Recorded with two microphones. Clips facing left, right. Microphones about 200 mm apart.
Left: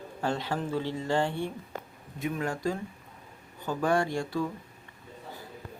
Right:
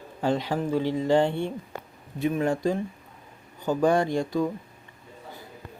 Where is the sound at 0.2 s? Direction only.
15° right (ahead or behind).